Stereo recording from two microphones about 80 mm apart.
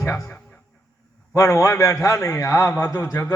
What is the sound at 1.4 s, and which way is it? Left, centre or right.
A man's voice, left.